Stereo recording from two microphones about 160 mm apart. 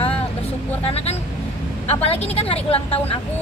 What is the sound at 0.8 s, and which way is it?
A woman's voice, 40° left (ahead or behind).